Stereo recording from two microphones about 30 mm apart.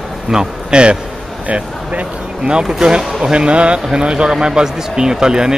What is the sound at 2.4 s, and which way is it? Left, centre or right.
Speech, right.